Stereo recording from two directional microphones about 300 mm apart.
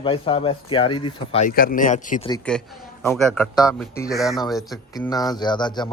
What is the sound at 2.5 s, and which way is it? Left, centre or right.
A man's voice, centre.